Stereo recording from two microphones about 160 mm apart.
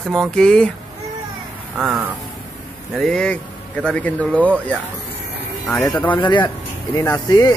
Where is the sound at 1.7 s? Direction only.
10° right (ahead or behind).